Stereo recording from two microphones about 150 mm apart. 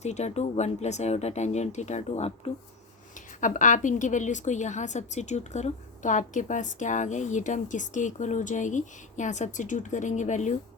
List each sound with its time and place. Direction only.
0.0 s speech: 50° left (ahead or behind)
3.2 s a woman's voice: 60° left (ahead or behind)